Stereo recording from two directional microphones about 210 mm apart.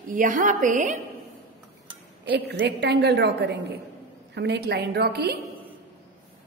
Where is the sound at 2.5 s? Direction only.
50° right (ahead or behind).